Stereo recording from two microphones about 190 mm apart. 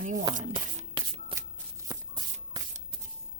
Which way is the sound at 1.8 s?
20° right (ahead or behind).